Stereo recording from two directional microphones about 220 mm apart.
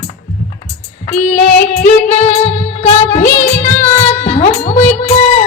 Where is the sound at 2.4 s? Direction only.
30° left (ahead or behind).